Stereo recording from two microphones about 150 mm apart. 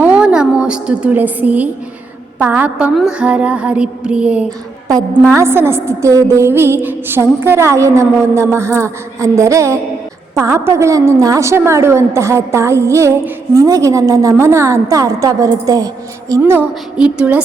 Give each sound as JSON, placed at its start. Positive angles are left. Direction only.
{"t": 0.0, "sound": "a sound", "side_deg": -10}
{"t": 2.4, "sound": "a woman's voice", "side_deg": -10}
{"t": 4.9, "sound": "a woman's voice", "side_deg": -20}